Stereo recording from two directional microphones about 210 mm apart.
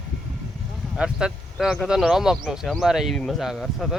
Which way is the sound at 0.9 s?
5° right (ahead or behind).